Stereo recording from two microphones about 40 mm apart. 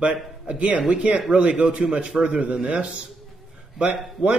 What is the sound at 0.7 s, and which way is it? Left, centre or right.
Speech, right.